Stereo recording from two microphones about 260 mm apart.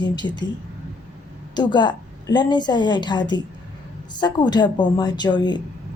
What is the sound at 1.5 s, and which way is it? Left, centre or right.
A woman's voice, centre.